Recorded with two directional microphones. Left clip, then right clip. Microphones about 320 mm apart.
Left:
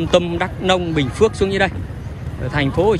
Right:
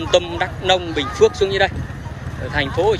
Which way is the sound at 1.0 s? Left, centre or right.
Centre.